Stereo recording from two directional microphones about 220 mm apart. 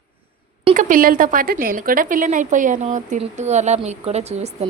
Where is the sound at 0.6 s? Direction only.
35° right (ahead or behind).